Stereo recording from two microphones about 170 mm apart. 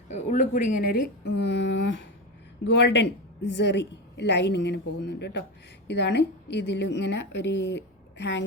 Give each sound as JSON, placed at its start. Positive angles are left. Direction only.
{"t": 0.1, "sound": "a woman's voice", "side_deg": 50}